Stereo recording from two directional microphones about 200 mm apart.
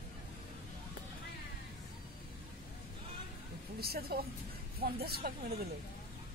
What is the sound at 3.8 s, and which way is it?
Speech, 50° right (ahead or behind).